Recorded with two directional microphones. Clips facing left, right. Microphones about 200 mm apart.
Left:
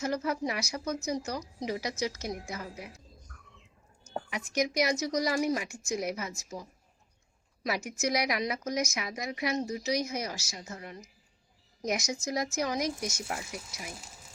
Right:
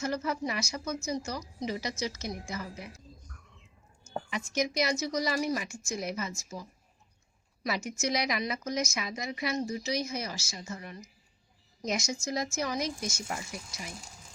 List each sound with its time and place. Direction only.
0.0 s a woman's voice: 15° left (ahead or behind)
4.1 s a woman's voice: 15° left (ahead or behind)
7.9 s a woman's voice: 10° left (ahead or behind)